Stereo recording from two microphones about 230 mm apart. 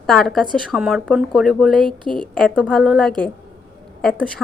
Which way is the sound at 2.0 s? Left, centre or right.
Right.